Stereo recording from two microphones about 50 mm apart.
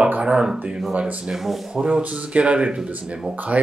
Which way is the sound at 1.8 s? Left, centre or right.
Right.